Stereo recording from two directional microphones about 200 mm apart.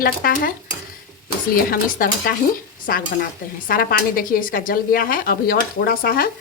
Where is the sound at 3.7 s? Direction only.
45° left (ahead or behind).